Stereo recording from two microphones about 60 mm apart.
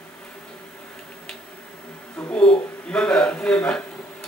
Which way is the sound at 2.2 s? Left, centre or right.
Centre.